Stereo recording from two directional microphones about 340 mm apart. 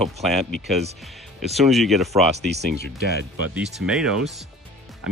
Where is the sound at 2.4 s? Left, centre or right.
Right.